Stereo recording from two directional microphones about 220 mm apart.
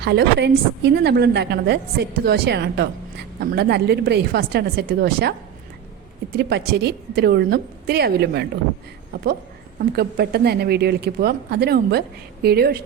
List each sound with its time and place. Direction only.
0.0 s a woman's voice: 50° right (ahead or behind)
6.3 s a woman's voice: 45° right (ahead or behind)
9.9 s a woman's voice: 45° right (ahead or behind)